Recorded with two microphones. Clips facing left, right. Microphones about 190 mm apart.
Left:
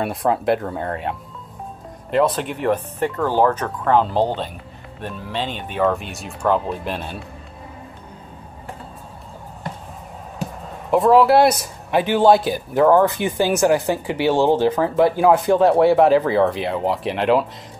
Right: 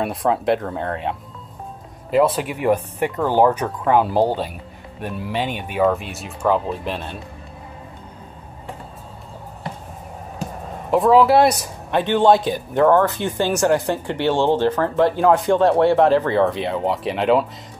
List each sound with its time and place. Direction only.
0.0 s a man's voice: centre (ahead or behind)
10.9 s a man's voice: centre (ahead or behind)